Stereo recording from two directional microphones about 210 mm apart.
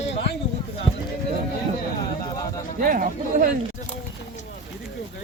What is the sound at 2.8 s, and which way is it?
Speech, 40° right (ahead or behind).